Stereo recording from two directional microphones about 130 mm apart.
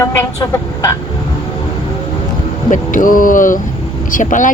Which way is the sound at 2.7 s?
90° left.